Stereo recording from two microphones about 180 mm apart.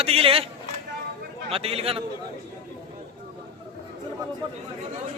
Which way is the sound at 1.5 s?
35° right (ahead or behind).